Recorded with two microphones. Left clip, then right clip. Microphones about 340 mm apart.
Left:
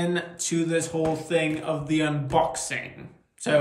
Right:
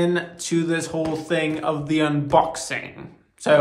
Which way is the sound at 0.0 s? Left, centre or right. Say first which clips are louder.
Right 5 dB; centre.